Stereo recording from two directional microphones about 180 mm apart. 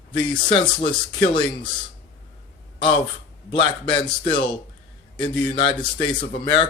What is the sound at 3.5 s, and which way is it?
Speech, 30° left (ahead or behind).